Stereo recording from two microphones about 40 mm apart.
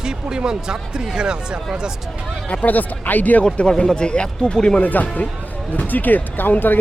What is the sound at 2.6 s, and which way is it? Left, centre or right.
Speech, left.